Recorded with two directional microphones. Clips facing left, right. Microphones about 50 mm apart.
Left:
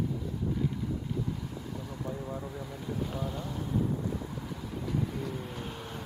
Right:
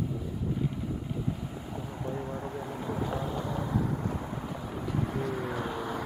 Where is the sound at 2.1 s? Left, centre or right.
Right.